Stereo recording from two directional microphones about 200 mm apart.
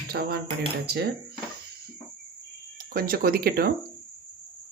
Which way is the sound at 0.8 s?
50° right (ahead or behind).